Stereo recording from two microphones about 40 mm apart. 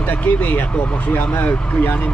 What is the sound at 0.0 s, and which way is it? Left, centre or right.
Speech, left.